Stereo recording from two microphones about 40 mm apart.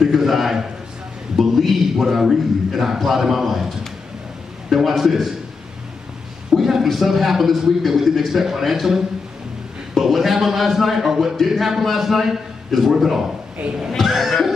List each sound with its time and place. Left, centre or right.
0.0 s a man's voice: centre
6.5 s a man's voice: centre